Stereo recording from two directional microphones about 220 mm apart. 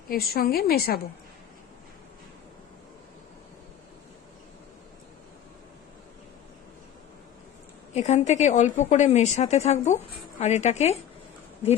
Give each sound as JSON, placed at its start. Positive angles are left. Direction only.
{"t": 0.1, "sound": "a woman's voice", "side_deg": 45}
{"t": 7.9, "sound": "a woman's voice", "side_deg": 30}